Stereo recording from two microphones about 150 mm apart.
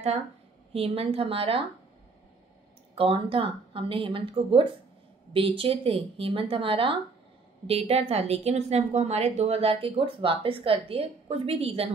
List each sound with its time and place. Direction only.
0.7 s a woman's voice: 40° right (ahead or behind)
2.9 s a woman's voice: 40° right (ahead or behind)